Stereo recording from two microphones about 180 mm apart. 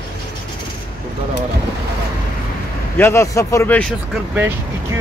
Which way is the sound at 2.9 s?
10° left (ahead or behind).